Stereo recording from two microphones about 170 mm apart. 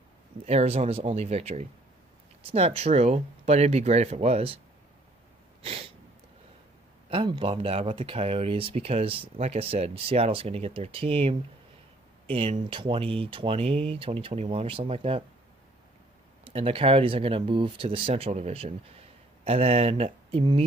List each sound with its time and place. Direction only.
0.4 s speech: 40° right (ahead or behind)
5.6 s a sound: 35° right (ahead or behind)
7.1 s speech: 30° right (ahead or behind)
16.4 s speech: 35° right (ahead or behind)